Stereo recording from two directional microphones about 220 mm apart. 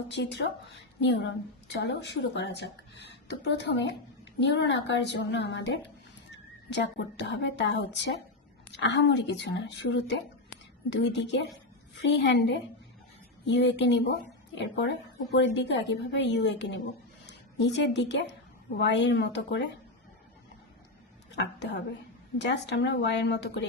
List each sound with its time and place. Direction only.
0.1 s a woman's voice: 50° left (ahead or behind)
21.3 s speech: 50° left (ahead or behind)